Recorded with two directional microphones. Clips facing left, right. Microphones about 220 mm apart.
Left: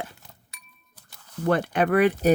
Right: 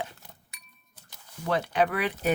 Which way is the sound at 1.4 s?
50° left (ahead or behind).